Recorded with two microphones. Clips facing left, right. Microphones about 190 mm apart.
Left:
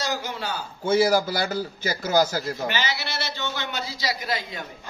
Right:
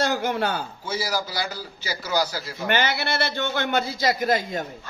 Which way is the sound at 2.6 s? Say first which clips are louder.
Right 4 dB; 55° right (ahead or behind).